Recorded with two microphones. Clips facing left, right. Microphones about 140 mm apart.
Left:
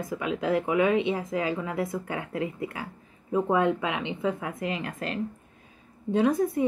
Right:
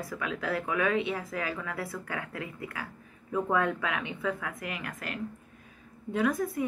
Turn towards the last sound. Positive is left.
turn(degrees=25)  # may be behind; listen again after turning